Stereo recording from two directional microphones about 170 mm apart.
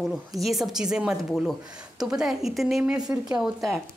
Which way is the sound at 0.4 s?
Centre (ahead or behind).